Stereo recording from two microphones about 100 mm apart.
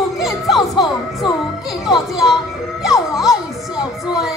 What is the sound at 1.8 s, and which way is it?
Speech, 5° right (ahead or behind).